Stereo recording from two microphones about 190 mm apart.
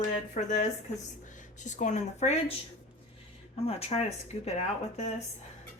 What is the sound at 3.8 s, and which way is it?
Speech, 30° left (ahead or behind).